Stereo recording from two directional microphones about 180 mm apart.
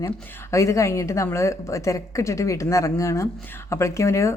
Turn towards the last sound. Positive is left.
turn(degrees=15)  # may be behind; listen again after turning